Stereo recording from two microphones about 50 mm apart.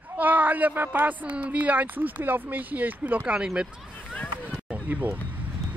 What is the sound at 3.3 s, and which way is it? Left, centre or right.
Speech, centre.